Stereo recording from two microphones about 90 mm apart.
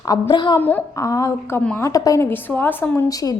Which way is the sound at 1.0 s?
40° left (ahead or behind).